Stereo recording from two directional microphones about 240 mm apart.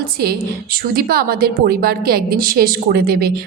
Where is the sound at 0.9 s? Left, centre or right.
Right.